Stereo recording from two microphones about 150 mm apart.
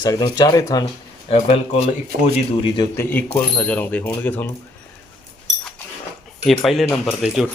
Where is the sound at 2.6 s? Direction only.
30° left (ahead or behind).